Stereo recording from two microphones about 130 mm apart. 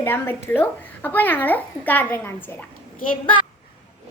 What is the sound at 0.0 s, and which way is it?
Speech, 15° left (ahead or behind).